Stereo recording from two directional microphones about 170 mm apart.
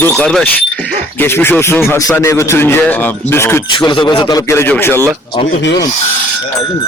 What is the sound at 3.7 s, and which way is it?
A man's voice, 30° left (ahead or behind).